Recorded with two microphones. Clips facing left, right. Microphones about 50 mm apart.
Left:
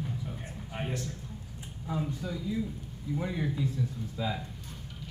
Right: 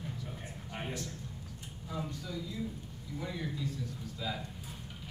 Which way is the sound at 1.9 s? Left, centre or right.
Left.